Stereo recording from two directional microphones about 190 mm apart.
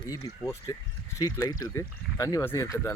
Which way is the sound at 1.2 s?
20° left (ahead or behind).